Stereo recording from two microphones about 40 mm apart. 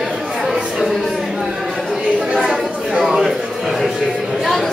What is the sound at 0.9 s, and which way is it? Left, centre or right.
Chatter, centre.